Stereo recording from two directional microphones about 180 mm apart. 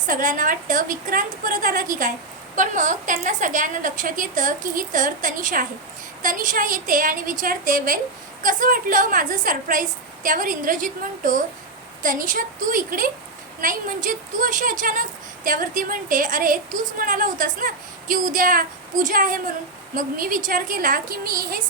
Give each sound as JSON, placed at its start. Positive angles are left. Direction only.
{"t": 0.0, "sound": "a woman's voice", "side_deg": -45}